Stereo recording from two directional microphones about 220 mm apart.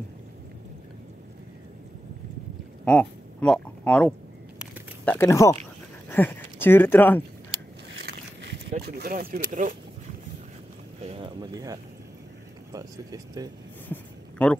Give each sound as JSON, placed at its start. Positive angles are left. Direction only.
{"t": 2.8, "sound": "speech", "side_deg": 5}
{"t": 8.0, "sound": "vehicle", "side_deg": -50}
{"t": 8.8, "sound": "speech", "side_deg": -45}
{"t": 11.1, "sound": "speech", "side_deg": -25}
{"t": 14.4, "sound": "speech", "side_deg": 5}